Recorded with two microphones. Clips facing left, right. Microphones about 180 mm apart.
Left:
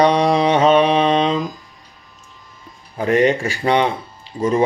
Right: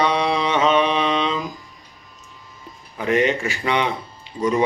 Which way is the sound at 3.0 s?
35° left (ahead or behind).